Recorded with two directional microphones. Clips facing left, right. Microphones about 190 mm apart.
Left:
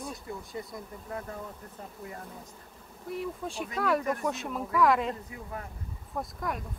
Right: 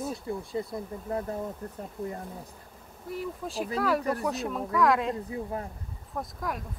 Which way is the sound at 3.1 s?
Centre (ahead or behind).